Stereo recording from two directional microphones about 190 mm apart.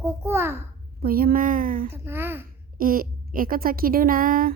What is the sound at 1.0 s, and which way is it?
Speech, 50° right (ahead or behind).